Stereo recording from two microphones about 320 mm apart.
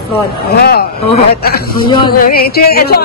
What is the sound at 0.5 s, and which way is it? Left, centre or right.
Music, left.